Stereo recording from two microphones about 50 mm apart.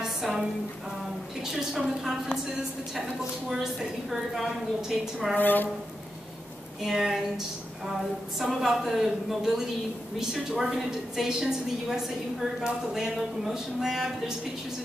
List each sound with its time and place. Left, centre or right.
0.0 s a sound: centre
1.4 s a woman's voice: centre
3.6 s a woman's voice: centre
5.4 s speech: left
6.8 s a woman's voice: centre